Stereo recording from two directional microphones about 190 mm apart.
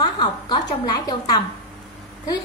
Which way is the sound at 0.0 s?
25° left (ahead or behind).